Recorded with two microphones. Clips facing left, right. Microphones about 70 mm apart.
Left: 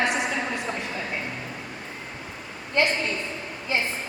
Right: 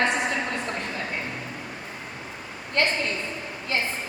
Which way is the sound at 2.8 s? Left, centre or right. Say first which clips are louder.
Left 1 dB; centre.